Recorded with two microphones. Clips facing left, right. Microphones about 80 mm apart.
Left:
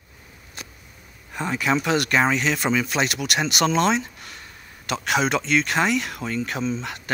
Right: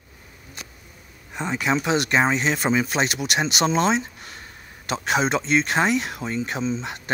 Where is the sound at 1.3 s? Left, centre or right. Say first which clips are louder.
Left 1 dB; centre.